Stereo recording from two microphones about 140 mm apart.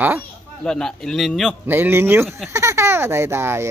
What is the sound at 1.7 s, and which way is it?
Speech, 15° right (ahead or behind).